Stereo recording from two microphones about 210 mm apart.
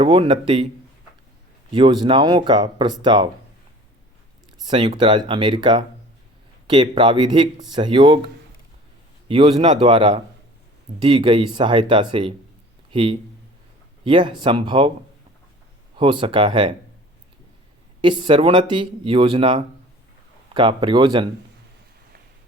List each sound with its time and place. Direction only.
0.0 s speech: 25° right (ahead or behind)
1.7 s speech: 20° right (ahead or behind)
4.6 s speech: 25° right (ahead or behind)
9.3 s speech: 25° right (ahead or behind)
16.0 s speech: 25° right (ahead or behind)
18.0 s speech: 20° right (ahead or behind)